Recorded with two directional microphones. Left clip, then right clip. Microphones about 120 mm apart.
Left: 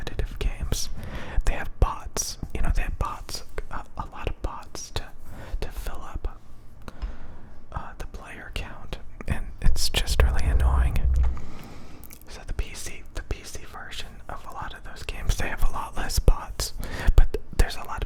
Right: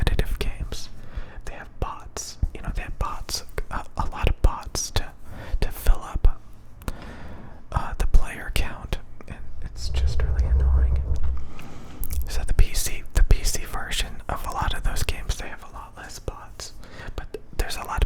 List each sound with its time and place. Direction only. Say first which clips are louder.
0.0 s whispering: right 7 dB; 25° right (ahead or behind)
0.7 s whispering: left 5 dB; 30° left (ahead or behind)
1.8 s whispering: left 2 dB; 15° left (ahead or behind)
3.0 s whispering: right 4 dB; centre (ahead or behind); by 6.3 s 15° right (ahead or behind)
6.8 s a sound: right 6 dB; 25° right (ahead or behind)
7.7 s whispering: right 7 dB; 25° right (ahead or behind)
9.1 s whispering: left 8 dB; 30° left (ahead or behind); by 11.0 s 50° left (ahead or behind)
11.5 s a sound: right 2 dB; 5° right (ahead or behind)
12.3 s whispering: right 6 dB; 20° right (ahead or behind)
13.1 s whispering: right 10 dB; 25° right (ahead or behind)
15.3 s whispering: left 4 dB; 15° left (ahead or behind)
15.5 s whispering: left 7 dB; 30° left (ahead or behind)
17.9 s whispering: right 5 dB; 15° right (ahead or behind)